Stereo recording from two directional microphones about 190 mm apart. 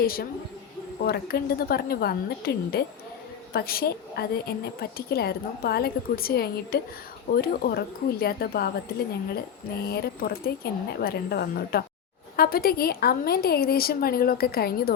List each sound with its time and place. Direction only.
0.0 s a woman's voice: 50° left (ahead or behind)
9.8 s a woman's voice: 55° left (ahead or behind)